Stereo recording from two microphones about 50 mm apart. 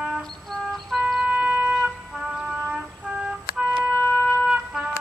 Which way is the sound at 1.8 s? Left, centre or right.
Centre.